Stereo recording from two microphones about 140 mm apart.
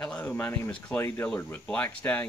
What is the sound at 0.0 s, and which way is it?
Speech, 5° left (ahead or behind).